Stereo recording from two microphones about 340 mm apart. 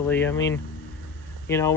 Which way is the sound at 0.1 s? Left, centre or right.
Centre.